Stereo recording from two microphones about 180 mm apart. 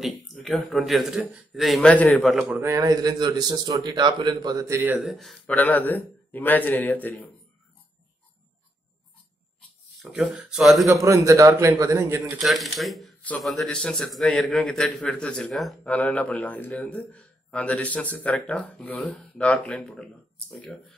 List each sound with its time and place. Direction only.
0.0 s speech: centre (ahead or behind)
2.4 s a man's voice: 15° right (ahead or behind)
4.9 s speech: centre (ahead or behind)
9.9 s speech: centre (ahead or behind)
11.1 s a man's voice: 20° right (ahead or behind)
12.4 s speech: centre (ahead or behind)